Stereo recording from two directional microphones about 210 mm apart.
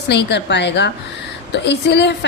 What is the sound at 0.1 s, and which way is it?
A woman's voice, 55° left (ahead or behind).